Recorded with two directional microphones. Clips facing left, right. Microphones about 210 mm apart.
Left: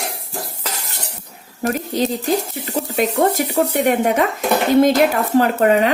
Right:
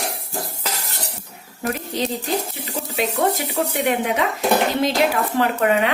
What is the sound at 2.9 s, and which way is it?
A woman's voice, 45° left (ahead or behind).